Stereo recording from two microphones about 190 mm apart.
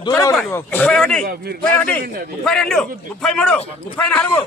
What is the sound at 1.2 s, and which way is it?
Speech, 50° right (ahead or behind).